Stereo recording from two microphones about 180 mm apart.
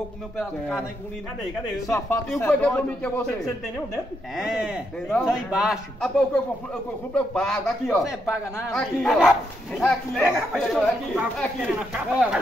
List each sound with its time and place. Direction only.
0.4 s speech: centre (ahead or behind)
2.2 s speech: 5° left (ahead or behind)
4.4 s speech: 5° right (ahead or behind)